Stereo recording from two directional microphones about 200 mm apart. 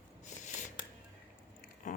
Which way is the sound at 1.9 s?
35° left (ahead or behind).